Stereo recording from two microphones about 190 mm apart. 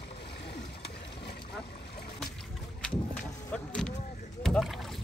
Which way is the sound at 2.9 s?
5° left (ahead or behind).